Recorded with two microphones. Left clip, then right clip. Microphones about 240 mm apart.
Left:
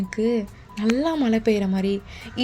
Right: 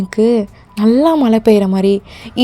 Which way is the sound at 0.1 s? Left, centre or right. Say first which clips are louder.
Right 11 dB; right.